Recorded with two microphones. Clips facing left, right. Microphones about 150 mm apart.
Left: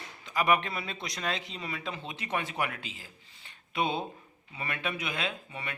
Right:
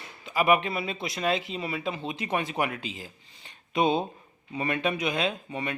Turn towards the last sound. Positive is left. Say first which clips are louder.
# right 7 dB
turn(degrees=-20)  # may be behind; listen again after turning